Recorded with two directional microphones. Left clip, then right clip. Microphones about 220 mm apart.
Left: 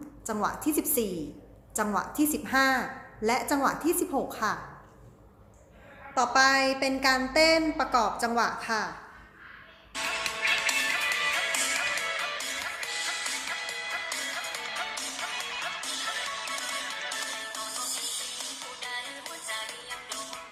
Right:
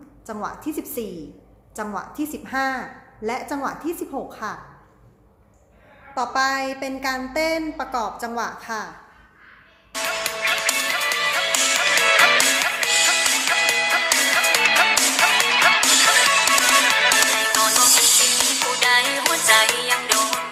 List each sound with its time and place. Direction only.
0.3 s a woman's voice: centre (ahead or behind)
6.1 s a woman's voice: centre (ahead or behind)
9.9 s music: 40° right (ahead or behind)